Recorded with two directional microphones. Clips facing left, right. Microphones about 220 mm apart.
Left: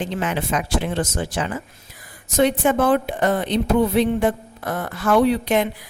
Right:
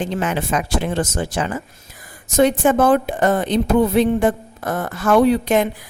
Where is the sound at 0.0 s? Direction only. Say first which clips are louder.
Right 2 dB; 45° right (ahead or behind).